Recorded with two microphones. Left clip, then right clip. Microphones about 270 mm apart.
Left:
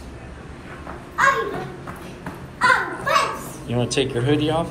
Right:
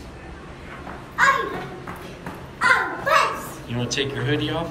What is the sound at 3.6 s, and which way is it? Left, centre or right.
A man's voice, centre.